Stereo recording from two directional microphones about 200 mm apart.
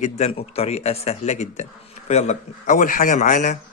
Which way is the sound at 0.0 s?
30° left (ahead or behind).